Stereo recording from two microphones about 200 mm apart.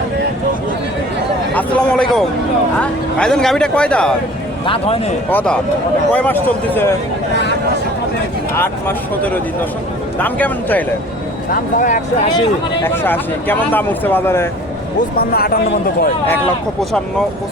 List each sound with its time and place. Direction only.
1.5 s speech: 5° left (ahead or behind)
4.6 s speech: 30° left (ahead or behind)
5.3 s speech: 10° left (ahead or behind)
8.5 s speech: 10° left (ahead or behind)
12.8 s speech: 10° left (ahead or behind)
15.1 s speech: 50° left (ahead or behind)